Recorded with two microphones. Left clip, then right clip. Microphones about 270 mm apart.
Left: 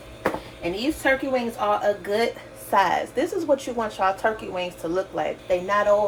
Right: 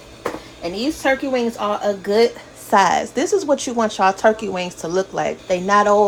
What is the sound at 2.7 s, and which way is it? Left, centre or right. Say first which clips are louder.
A woman's voice: right 5 dB; right.